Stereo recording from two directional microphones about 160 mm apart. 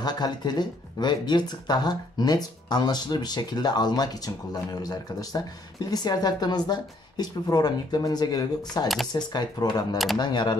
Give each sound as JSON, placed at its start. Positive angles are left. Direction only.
{"t": 0.0, "sound": "speech", "side_deg": 25}